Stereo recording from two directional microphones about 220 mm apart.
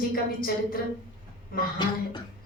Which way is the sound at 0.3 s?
40° left (ahead or behind).